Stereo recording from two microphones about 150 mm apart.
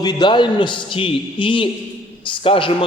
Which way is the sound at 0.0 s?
30° left (ahead or behind).